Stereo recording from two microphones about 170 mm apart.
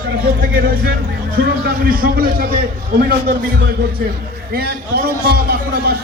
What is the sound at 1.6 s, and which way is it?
A man's voice, 60° right (ahead or behind).